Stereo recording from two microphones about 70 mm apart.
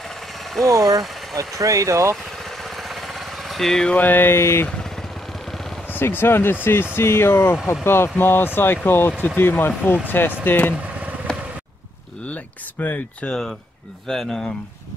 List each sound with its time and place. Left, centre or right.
0.7 s speech: right
3.4 s speech: centre
3.9 s speech: left
5.9 s speech: left
11.3 s a sound: centre
12.3 s a sound: left
13.3 s speech: centre